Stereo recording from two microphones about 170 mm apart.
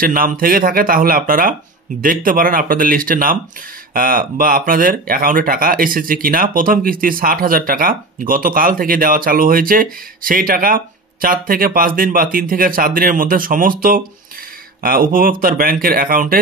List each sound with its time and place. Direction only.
0.0 s speech: 55° right (ahead or behind)